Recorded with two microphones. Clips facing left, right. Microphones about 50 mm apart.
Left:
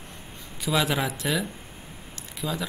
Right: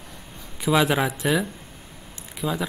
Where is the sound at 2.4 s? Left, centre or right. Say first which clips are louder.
Right 4 dB; centre.